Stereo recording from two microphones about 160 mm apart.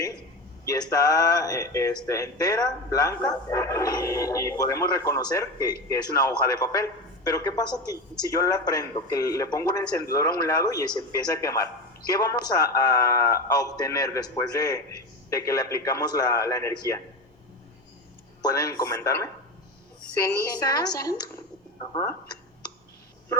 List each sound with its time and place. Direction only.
0.6 s a woman's voice: 20° left (ahead or behind)
18.4 s speech: 25° left (ahead or behind)
20.5 s speech: 25° left (ahead or behind)